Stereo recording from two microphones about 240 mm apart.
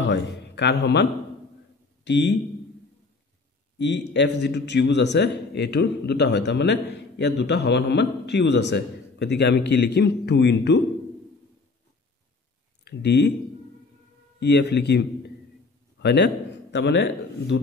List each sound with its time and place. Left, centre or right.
0.0 s a man's voice: left
2.0 s speech: left
3.7 s a man's voice: left
12.8 s speech: left
14.4 s a man's voice: left